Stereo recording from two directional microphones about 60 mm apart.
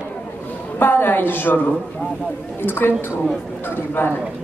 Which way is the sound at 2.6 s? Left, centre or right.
Left.